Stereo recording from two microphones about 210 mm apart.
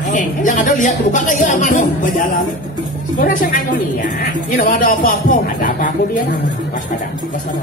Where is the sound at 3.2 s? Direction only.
40° left (ahead or behind).